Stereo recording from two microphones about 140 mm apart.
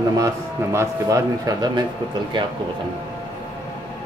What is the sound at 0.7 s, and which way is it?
A man's voice, 25° right (ahead or behind).